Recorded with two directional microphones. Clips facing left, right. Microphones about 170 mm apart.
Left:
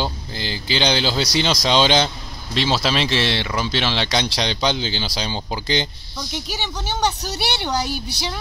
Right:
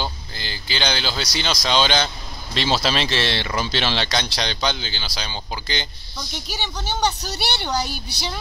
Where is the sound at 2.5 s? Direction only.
10° left (ahead or behind); by 5.9 s 25° left (ahead or behind).